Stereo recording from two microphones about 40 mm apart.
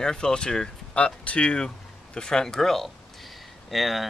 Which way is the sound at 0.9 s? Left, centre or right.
Left.